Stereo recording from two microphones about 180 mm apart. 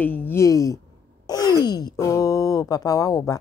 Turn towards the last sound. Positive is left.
turn(degrees=20)  # may be behind; listen again after turning